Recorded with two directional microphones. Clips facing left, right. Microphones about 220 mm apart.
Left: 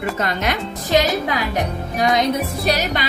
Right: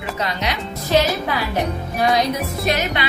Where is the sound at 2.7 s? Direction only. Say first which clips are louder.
Even; 35° left (ahead or behind).